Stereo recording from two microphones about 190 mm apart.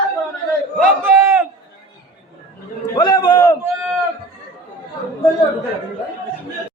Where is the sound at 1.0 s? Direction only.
15° right (ahead or behind).